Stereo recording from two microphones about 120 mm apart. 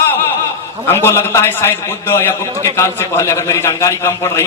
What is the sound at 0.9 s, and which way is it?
A man's voice, 20° left (ahead or behind).